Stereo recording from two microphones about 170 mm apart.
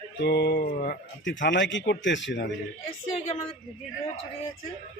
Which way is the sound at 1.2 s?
90° left.